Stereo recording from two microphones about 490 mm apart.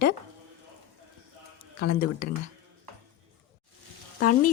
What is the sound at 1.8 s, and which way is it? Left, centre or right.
Speech, centre.